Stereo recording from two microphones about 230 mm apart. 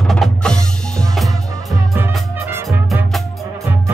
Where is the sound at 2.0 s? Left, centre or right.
Centre.